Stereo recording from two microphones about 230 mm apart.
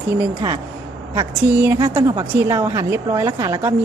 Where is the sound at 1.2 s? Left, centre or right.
Centre.